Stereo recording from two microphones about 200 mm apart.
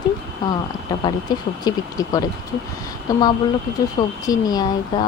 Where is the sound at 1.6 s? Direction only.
20° left (ahead or behind).